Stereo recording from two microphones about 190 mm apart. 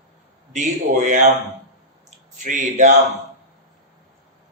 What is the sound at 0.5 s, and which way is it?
Speech, 40° right (ahead or behind).